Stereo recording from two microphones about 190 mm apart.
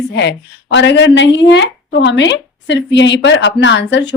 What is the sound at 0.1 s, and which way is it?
A woman's voice, 65° left (ahead or behind).